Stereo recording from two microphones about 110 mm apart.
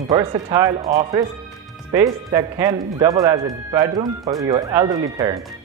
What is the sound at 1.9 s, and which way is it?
Speech, 30° right (ahead or behind).